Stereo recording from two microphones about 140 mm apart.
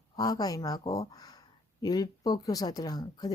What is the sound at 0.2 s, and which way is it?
Speech, 30° left (ahead or behind).